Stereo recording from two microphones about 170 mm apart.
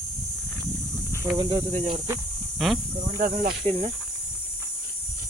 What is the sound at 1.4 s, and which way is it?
Speech, 30° right (ahead or behind).